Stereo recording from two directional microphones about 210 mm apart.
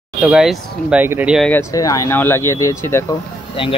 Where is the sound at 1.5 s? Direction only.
15° left (ahead or behind).